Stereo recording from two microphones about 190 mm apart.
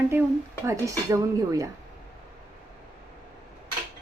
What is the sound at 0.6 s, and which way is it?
A woman's voice, 15° right (ahead or behind).